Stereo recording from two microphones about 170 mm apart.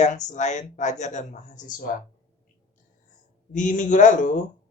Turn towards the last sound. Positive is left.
turn(degrees=45)  # may be behind; listen again after turning